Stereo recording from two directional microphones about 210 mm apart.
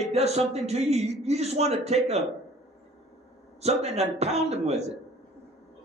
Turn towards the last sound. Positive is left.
turn(degrees=-30)  # may be behind; listen again after turning